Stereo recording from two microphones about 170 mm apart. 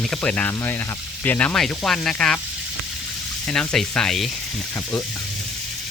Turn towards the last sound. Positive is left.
turn(degrees=0)  # may be behind; listen again after turning